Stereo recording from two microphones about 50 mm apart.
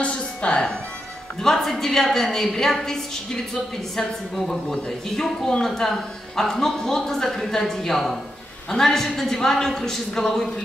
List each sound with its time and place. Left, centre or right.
0.0 s music: left
1.4 s a man's voice: centre